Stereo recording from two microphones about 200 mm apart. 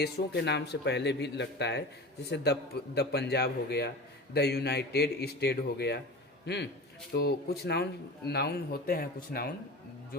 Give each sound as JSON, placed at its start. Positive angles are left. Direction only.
{"t": 0.0, "sound": "a man's voice", "side_deg": 55}